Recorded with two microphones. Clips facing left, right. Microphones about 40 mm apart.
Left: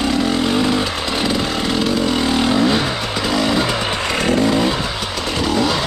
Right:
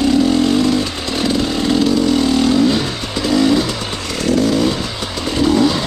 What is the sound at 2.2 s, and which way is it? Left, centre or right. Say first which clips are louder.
Vehicle: right 2 dB; centre.